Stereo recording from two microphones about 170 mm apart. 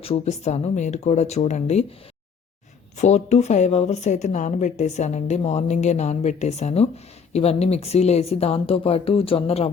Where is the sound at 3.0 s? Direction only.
40° left (ahead or behind).